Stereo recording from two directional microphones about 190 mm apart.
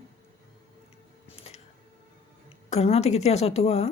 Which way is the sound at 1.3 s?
30° left (ahead or behind).